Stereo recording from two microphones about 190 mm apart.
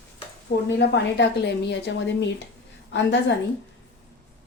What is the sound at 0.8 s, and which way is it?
A woman's voice, 65° left (ahead or behind).